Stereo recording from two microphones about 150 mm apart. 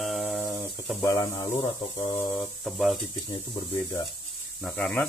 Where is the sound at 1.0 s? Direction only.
25° left (ahead or behind).